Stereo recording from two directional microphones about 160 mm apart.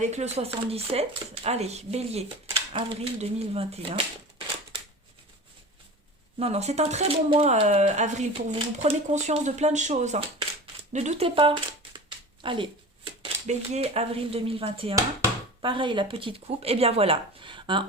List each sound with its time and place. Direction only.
0.0 s speech: 45° right (ahead or behind)
6.4 s speech: 40° right (ahead or behind)
10.9 s a sound: 40° right (ahead or behind)
13.2 s speech: 40° right (ahead or behind)